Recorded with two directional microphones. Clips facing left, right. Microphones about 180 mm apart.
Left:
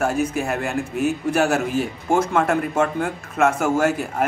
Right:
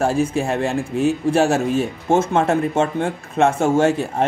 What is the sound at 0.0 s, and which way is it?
A man's voice, 30° right (ahead or behind).